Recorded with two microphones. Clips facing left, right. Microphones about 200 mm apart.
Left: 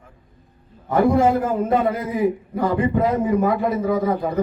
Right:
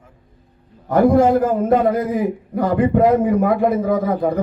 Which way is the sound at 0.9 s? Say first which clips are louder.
Right 3 dB; 45° right (ahead or behind).